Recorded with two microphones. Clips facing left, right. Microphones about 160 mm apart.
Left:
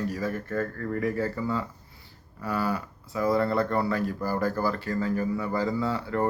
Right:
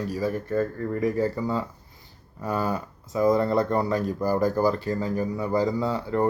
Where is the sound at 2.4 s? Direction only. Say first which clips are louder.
Right 2 dB; 20° right (ahead or behind).